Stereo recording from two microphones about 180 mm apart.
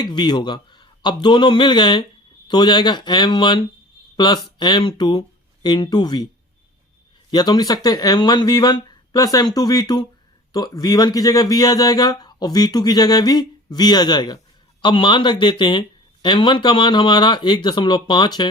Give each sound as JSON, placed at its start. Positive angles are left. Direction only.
{"t": 0.0, "sound": "speech", "side_deg": 25}
{"t": 7.3, "sound": "speech", "side_deg": 25}